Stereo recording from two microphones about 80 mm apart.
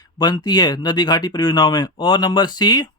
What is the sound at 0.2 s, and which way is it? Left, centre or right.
Speech, left.